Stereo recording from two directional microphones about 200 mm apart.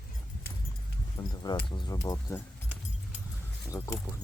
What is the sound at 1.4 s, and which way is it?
Speech, 20° left (ahead or behind).